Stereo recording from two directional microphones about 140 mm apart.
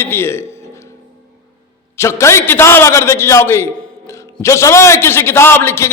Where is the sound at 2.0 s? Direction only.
20° left (ahead or behind).